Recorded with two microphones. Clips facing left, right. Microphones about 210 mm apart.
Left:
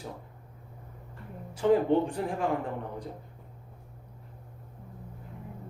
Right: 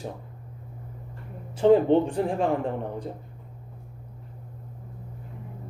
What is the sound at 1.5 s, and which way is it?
Speech, 25° right (ahead or behind).